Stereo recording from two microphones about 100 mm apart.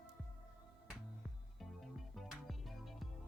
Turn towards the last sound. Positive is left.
turn(degrees=0)  # may be behind; listen again after turning